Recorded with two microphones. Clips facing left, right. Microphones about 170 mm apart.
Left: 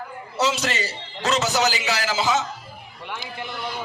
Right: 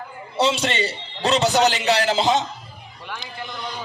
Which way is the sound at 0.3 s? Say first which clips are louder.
Right 3 dB; 30° right (ahead or behind).